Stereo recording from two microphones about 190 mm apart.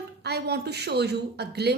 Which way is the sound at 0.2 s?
60° right (ahead or behind).